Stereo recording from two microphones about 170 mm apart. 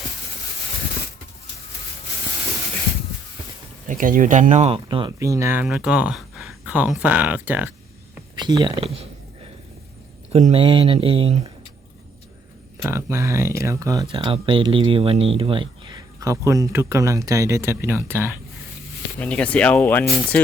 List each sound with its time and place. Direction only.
3.8 s speech: 55° right (ahead or behind)
4.9 s speech: 25° right (ahead or behind)
5.6 s speech: 5° right (ahead or behind)
8.4 s speech: 25° right (ahead or behind)
10.3 s speech: 35° right (ahead or behind)
12.8 s speech: 15° right (ahead or behind)
19.2 s speech: 5° left (ahead or behind)